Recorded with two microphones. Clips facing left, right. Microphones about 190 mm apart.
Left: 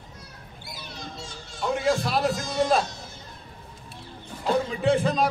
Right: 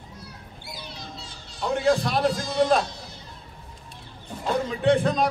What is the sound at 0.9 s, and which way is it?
Children playing, 50° left (ahead or behind).